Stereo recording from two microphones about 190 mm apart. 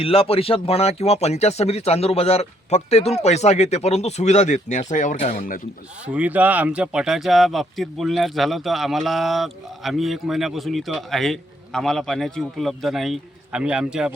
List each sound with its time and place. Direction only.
0.0 s speech: 30° left (ahead or behind)
6.1 s speech: 10° right (ahead or behind)